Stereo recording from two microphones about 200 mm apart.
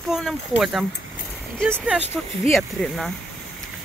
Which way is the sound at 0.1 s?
Centre (ahead or behind).